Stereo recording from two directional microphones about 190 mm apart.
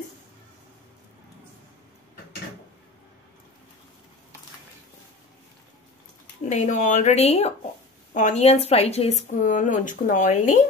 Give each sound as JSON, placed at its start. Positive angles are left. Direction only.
{"t": 6.5, "sound": "a woman's voice", "side_deg": 40}